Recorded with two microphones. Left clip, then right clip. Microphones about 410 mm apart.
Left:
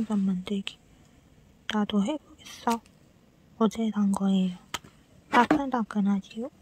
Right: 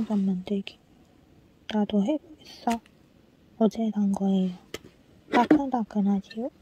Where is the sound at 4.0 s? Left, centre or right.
Centre.